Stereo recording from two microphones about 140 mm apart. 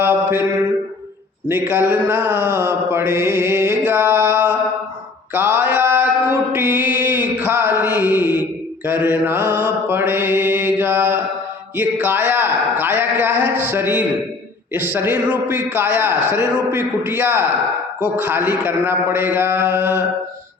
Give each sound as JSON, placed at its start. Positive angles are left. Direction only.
{"t": 0.0, "sound": "mantra", "side_deg": -15}
{"t": 1.5, "sound": "speech", "side_deg": -15}
{"t": 5.3, "sound": "mantra", "side_deg": -15}
{"t": 11.8, "sound": "a man's voice", "side_deg": -15}